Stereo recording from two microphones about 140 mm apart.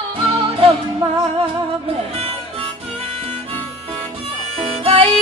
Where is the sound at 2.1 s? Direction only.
45° right (ahead or behind).